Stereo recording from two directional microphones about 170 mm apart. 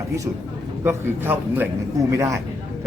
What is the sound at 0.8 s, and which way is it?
A man's voice, 10° right (ahead or behind).